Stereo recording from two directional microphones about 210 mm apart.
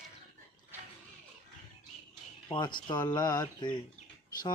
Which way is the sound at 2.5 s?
20° left (ahead or behind).